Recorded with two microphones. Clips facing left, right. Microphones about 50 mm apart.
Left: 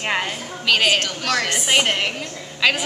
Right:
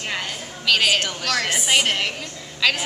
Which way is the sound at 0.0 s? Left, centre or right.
Left.